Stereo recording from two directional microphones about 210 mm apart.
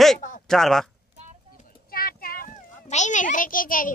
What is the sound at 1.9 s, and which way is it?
A child's voice, 45° left (ahead or behind).